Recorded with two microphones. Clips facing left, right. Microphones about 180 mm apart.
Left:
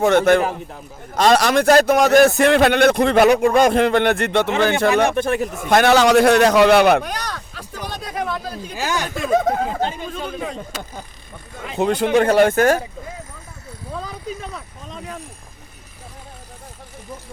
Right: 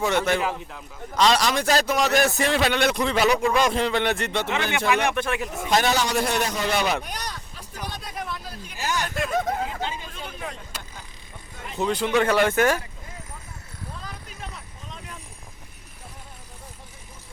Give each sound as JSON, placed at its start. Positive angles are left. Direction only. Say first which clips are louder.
{"t": 0.3, "sound": "a man's voice", "louder": "left 9 dB", "side_deg": 50}
{"t": 4.9, "sound": "speech", "louder": "left 6 dB", "side_deg": 40}
{"t": 5.6, "sound": "a man's voice", "louder": "left 9 dB", "side_deg": 65}
{"t": 9.8, "sound": "speech", "louder": "left 8 dB", "side_deg": 60}
{"t": 12.1, "sound": "speech", "louder": "left 6 dB", "side_deg": 40}